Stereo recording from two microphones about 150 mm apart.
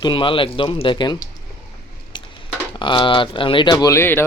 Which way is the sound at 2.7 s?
30° left (ahead or behind).